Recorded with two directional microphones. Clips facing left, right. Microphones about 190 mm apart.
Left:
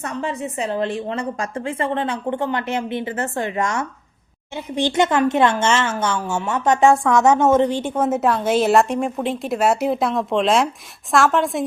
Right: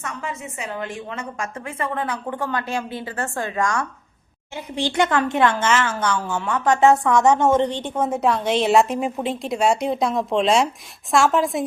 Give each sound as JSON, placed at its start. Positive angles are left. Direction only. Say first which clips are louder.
{"t": 0.0, "sound": "a woman's voice", "louder": "left 6 dB", "side_deg": 35}